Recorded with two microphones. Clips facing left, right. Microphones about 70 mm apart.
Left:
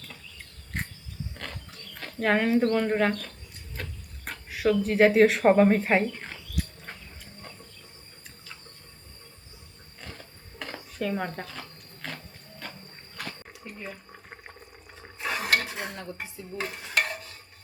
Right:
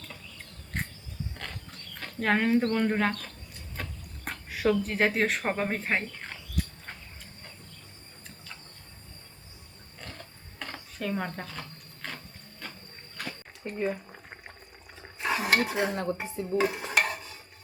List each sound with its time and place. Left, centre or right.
2.0 s speech: centre
3.8 s a sound: centre
4.3 s speech: centre
10.0 s a sound: centre
10.9 s speech: centre
12.0 s ratchet: centre
13.2 s a sound: centre
13.7 s speech: right
14.1 s water: centre
15.0 s dishes: centre
16.6 s stir: centre